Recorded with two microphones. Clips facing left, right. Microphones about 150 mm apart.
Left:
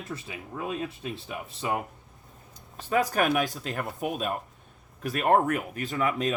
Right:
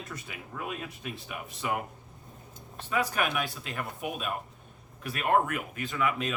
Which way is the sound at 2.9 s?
40° left (ahead or behind).